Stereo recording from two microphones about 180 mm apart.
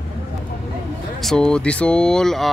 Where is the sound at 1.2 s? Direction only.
5° left (ahead or behind).